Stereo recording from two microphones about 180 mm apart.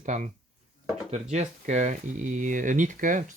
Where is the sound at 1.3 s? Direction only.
40° right (ahead or behind).